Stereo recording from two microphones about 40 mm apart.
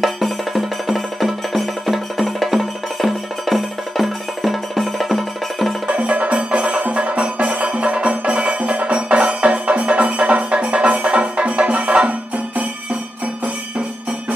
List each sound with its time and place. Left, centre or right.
0.0 s music: centre
5.9 s music: right